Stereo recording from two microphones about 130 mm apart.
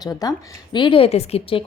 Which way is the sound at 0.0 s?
30° left (ahead or behind).